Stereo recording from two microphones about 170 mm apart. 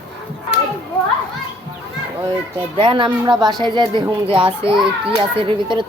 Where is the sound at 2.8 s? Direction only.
30° right (ahead or behind).